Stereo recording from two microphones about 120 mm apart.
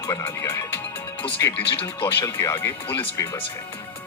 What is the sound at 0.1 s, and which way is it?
Speech, 25° left (ahead or behind).